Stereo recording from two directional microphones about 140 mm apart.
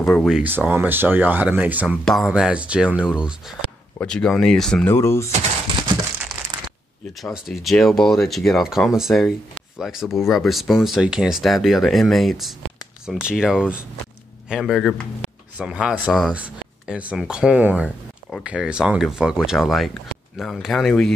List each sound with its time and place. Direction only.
0.2 s speech: 5° right (ahead or behind)
2.0 s speech: centre (ahead or behind)
4.0 s speech: 5° left (ahead or behind)
4.8 s speech: 20° left (ahead or behind)
7.4 s speech: centre (ahead or behind)